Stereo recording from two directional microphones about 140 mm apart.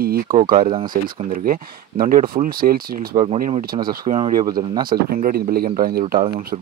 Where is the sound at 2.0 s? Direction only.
85° right.